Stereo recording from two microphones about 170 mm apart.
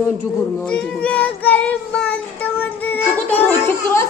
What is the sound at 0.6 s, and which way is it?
Cat, 5° left (ahead or behind).